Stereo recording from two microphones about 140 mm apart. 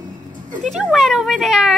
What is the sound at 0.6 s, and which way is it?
A child's voice, centre (ahead or behind).